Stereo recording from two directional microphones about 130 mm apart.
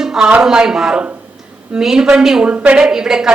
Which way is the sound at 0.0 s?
5° right (ahead or behind).